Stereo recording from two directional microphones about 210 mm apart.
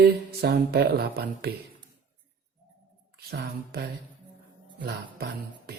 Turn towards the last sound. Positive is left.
turn(degrees=-50)  # may be behind; listen again after turning